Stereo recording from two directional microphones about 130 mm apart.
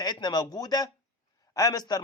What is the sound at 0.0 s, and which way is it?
A man's voice, 30° left (ahead or behind).